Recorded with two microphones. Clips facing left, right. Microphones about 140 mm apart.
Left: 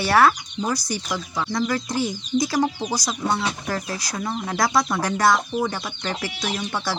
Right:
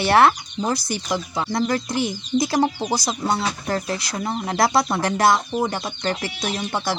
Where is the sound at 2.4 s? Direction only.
25° right (ahead or behind).